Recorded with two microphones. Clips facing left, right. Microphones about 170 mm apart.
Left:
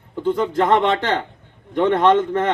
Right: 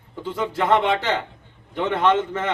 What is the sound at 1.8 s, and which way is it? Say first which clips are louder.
Speech: left 5 dB; 50° left (ahead or behind).